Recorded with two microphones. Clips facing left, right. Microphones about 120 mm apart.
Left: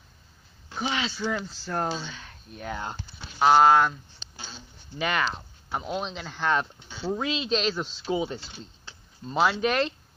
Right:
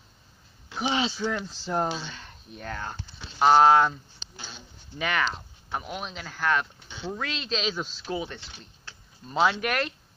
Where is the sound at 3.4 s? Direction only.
Centre (ahead or behind).